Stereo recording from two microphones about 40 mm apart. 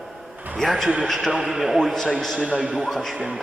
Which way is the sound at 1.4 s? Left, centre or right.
Centre.